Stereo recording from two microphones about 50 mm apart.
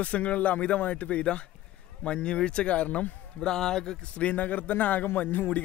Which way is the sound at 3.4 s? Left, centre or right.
Centre.